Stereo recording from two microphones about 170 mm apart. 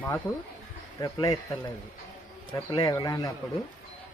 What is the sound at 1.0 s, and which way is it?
Speech, 20° left (ahead or behind).